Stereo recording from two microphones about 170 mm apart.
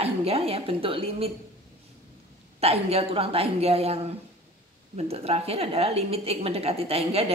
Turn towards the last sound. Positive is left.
turn(degrees=-35)  # may be behind; listen again after turning